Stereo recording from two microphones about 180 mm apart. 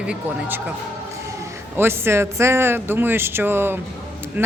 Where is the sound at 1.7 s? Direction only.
15° right (ahead or behind).